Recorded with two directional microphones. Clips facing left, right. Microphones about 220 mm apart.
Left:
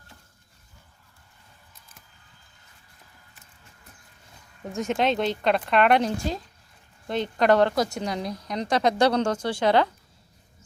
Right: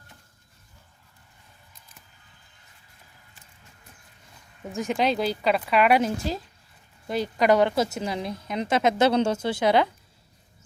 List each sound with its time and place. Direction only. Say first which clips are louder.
4.6 s speech: even; centre (ahead or behind)
8.6 s speech: even; 25° right (ahead or behind)
9.5 s speech: left 2 dB; 10° right (ahead or behind)